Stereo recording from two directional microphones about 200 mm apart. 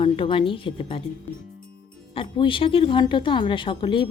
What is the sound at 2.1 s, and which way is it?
A woman's voice, 25° left (ahead or behind).